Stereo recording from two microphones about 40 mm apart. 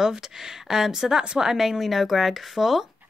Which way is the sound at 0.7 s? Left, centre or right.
Centre.